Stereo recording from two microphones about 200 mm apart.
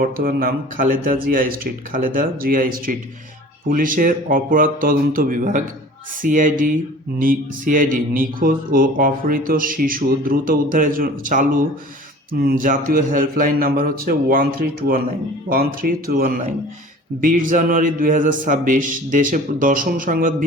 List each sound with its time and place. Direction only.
0.0 s a man's voice: 45° right (ahead or behind)